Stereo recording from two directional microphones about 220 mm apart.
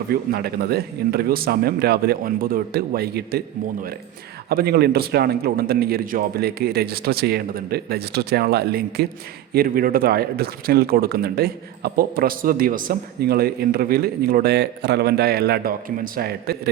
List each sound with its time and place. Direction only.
0.1 s a man's voice: 45° right (ahead or behind)
4.4 s a man's voice: 45° right (ahead or behind)